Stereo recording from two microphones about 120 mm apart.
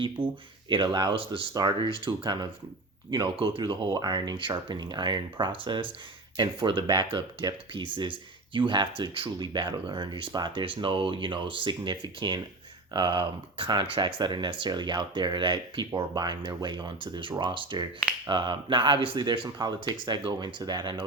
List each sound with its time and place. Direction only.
0.2 s speech: 45° right (ahead or behind)